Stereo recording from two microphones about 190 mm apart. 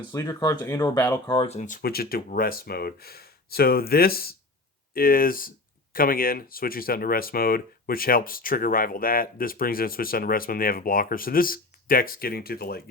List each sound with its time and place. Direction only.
0.0 s speech: 20° left (ahead or behind)
1.4 s speech: 35° left (ahead or behind); by 12.8 s 55° left (ahead or behind)